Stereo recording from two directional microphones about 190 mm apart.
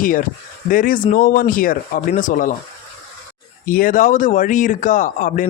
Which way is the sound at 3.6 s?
50° left (ahead or behind).